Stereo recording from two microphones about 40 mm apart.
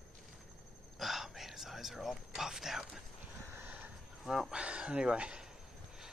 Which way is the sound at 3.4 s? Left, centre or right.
Right.